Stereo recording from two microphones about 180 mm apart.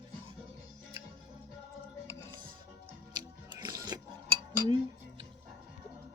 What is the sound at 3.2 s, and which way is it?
Biting, 25° right (ahead or behind).